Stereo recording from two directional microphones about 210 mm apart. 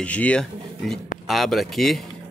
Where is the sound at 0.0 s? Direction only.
5° left (ahead or behind).